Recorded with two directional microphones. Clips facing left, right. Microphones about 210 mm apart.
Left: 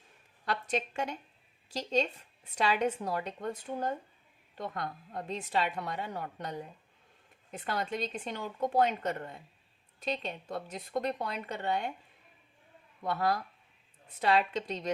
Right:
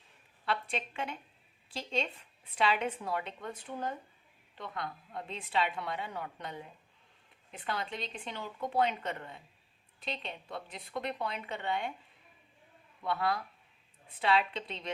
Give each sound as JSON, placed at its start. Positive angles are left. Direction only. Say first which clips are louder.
{"t": 0.4, "sound": "a woman's voice", "louder": "left 2 dB", "side_deg": 45}
{"t": 13.0, "sound": "a woman's voice", "louder": "left 2 dB", "side_deg": 45}